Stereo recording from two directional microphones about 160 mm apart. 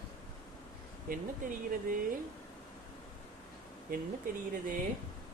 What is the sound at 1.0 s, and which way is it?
Speech, 60° right (ahead or behind).